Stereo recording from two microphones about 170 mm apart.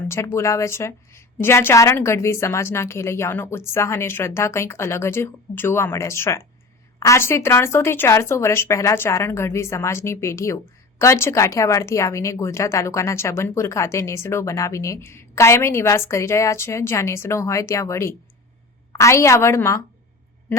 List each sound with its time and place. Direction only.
0.1 s a woman's voice: 15° left (ahead or behind)